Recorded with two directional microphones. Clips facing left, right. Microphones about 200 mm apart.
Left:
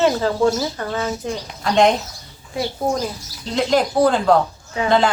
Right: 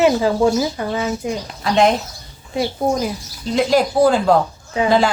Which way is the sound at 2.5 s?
20° right (ahead or behind).